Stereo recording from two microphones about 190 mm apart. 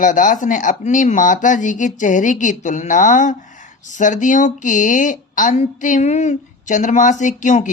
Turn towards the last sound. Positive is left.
turn(degrees=40)  # may be behind; listen again after turning